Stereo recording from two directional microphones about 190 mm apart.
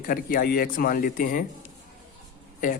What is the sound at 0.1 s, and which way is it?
Speech, 45° left (ahead or behind).